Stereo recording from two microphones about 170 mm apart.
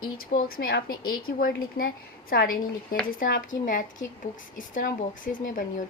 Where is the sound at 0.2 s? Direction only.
60° left (ahead or behind).